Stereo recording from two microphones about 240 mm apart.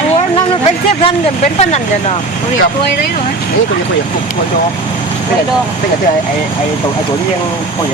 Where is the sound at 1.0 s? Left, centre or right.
Left.